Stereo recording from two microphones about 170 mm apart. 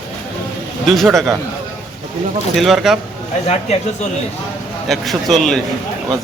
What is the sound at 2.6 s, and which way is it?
Speech, centre (ahead or behind).